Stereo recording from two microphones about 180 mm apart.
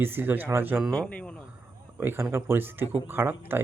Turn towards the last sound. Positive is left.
turn(degrees=-10)  # may be behind; listen again after turning